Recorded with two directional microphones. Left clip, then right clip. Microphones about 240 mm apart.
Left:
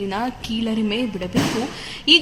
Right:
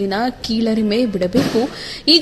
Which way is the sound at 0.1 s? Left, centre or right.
Centre.